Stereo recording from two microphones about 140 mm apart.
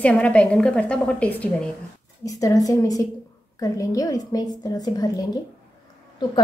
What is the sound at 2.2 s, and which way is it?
A woman's voice, 25° left (ahead or behind).